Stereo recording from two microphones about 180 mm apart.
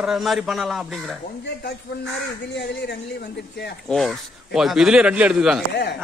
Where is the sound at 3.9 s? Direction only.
Centre (ahead or behind).